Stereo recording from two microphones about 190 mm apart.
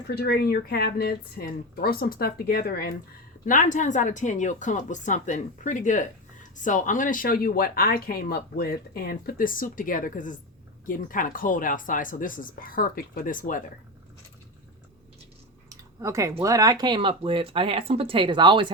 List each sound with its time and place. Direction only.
0.1 s speech: 55° left (ahead or behind)
3.4 s speech: 45° left (ahead or behind)
15.7 s a sound: 15° right (ahead or behind)
16.4 s speech: 15° right (ahead or behind)